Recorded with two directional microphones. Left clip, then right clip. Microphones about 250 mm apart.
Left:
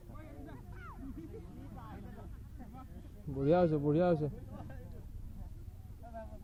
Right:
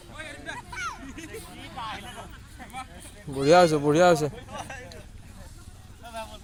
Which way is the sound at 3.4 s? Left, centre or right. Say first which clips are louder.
Right 12 dB; centre.